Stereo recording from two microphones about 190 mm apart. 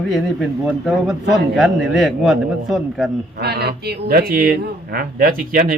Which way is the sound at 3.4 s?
60° right (ahead or behind).